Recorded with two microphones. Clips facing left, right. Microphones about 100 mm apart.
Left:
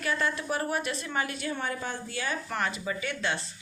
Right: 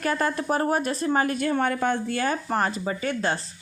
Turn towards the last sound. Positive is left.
turn(degrees=-40)  # may be behind; listen again after turning